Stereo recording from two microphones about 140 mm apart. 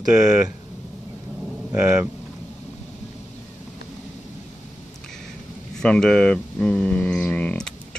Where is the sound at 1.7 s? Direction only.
10° right (ahead or behind).